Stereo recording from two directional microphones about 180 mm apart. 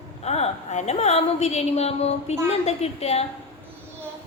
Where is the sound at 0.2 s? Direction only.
35° left (ahead or behind).